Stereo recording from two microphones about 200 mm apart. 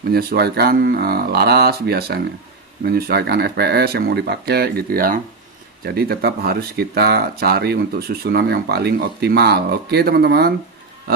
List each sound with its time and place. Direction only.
0.1 s speech: 50° right (ahead or behind)